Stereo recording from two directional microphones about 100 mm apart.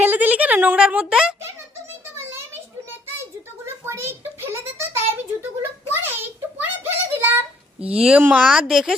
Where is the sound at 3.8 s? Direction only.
25° right (ahead or behind).